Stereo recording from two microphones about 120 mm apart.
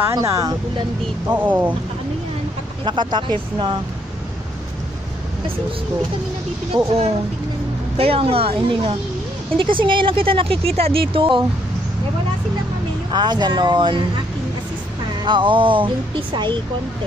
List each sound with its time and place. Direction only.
0.1 s speech: 30° right (ahead or behind)
1.3 s speech: 15° right (ahead or behind)
2.8 s speech: 40° right (ahead or behind)
6.7 s speech: 50° right (ahead or behind)
13.1 s speech: 40° right (ahead or behind)
15.2 s speech: 45° right (ahead or behind)